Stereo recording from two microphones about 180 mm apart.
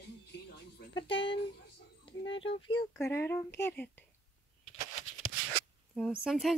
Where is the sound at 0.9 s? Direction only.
30° left (ahead or behind); by 4.0 s 10° left (ahead or behind).